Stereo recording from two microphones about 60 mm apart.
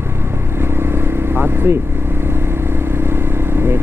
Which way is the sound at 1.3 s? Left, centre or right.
Right.